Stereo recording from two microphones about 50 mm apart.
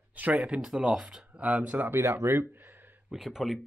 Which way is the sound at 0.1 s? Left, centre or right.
Right.